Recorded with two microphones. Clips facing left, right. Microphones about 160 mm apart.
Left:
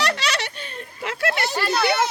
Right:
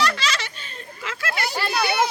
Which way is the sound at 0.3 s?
60° left (ahead or behind).